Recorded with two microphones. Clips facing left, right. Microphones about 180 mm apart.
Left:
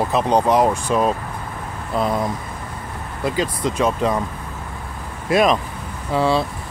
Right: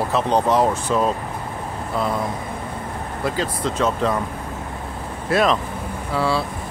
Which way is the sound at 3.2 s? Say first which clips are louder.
Left 2 dB; 15° left (ahead or behind).